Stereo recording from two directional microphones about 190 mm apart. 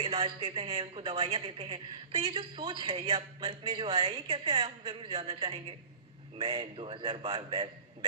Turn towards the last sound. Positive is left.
turn(degrees=-25)  # may be behind; listen again after turning